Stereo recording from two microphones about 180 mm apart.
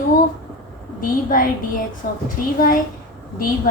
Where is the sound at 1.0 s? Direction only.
50° left (ahead or behind).